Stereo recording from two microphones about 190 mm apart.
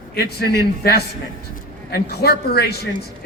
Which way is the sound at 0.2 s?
55° left (ahead or behind).